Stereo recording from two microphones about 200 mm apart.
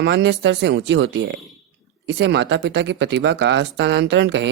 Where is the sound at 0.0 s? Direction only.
60° right (ahead or behind).